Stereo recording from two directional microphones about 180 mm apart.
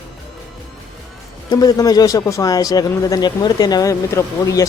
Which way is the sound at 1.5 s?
20° left (ahead or behind).